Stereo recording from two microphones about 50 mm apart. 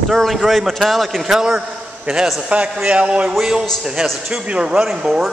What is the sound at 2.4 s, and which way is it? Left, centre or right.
Speech, right.